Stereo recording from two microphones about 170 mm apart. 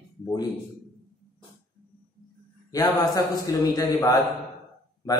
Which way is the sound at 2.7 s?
25° left (ahead or behind).